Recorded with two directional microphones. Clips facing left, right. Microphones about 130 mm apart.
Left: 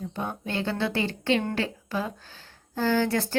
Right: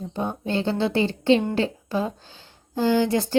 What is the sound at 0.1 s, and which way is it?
Speech, 25° right (ahead or behind).